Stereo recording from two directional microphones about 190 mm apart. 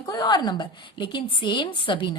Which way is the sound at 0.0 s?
20° left (ahead or behind).